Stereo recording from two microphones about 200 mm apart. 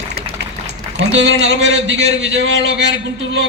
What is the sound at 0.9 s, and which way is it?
A man's voice, 60° right (ahead or behind).